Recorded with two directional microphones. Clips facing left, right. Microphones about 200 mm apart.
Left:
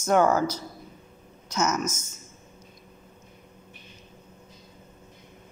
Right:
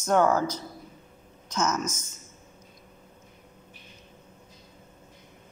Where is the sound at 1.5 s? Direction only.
10° left (ahead or behind).